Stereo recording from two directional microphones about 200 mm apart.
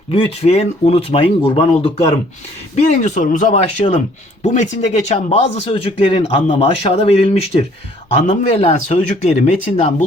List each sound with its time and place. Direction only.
0.1 s speech: 30° left (ahead or behind)